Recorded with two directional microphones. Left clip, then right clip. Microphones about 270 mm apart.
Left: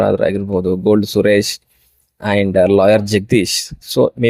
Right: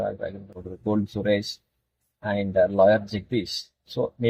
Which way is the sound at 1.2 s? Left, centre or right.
Left.